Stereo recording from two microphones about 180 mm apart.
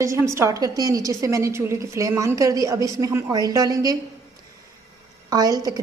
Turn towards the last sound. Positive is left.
turn(degrees=-20)  # may be behind; listen again after turning